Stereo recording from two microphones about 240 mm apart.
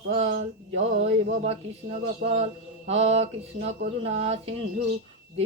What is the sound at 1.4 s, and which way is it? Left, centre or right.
Mantra, right.